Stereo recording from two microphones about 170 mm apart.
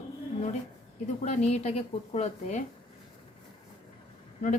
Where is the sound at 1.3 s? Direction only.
40° left (ahead or behind).